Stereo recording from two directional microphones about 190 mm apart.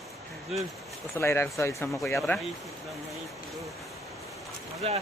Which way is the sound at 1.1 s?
15° left (ahead or behind).